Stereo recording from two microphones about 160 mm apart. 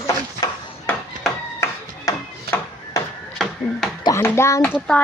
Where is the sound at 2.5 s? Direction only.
75° right (ahead or behind).